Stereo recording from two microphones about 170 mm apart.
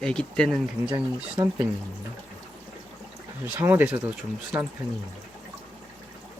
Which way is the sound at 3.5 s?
15° right (ahead or behind).